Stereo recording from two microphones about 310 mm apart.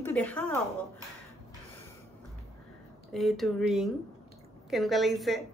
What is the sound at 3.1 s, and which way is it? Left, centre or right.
A woman's voice, centre.